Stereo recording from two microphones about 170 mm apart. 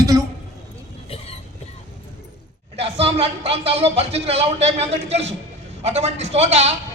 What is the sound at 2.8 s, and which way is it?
A man's voice, 35° right (ahead or behind).